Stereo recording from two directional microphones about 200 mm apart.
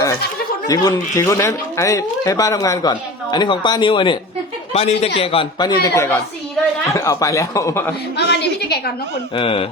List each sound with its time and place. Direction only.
0.7 s a man's voice: 15° left (ahead or behind)
8.1 s a woman's voice: 55° left (ahead or behind)
9.3 s a man's voice: 25° left (ahead or behind)